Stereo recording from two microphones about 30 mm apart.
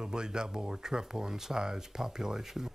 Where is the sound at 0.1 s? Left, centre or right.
Right.